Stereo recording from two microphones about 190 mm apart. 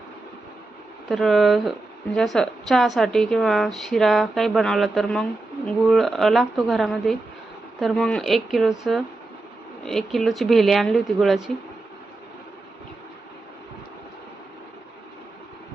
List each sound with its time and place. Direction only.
1.0 s a woman's voice: centre (ahead or behind)